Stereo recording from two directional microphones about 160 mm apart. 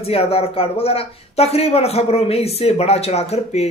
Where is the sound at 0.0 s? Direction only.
40° left (ahead or behind).